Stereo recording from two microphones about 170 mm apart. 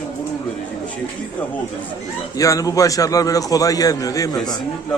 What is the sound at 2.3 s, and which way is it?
A man's voice, 20° left (ahead or behind).